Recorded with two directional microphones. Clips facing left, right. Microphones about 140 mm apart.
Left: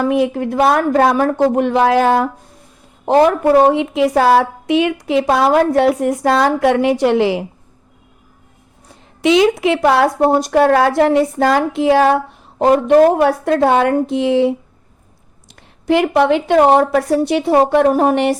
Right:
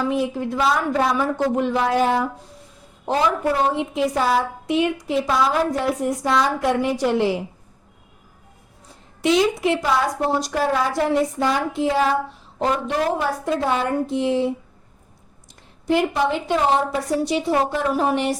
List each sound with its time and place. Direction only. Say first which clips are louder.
0.0 s a woman's voice: left 7 dB; 65° left (ahead or behind)
3.1 s a woman's voice: left 9 dB; 55° left (ahead or behind); by 7.4 s 90° left
9.2 s a woman's voice: left 6 dB; 90° left; by 13.9 s 70° left (ahead or behind)
14.1 s speech: left 6 dB; 85° left
15.5 s a woman's voice: left 5 dB; 75° left (ahead or behind); by 18.3 s 60° left (ahead or behind)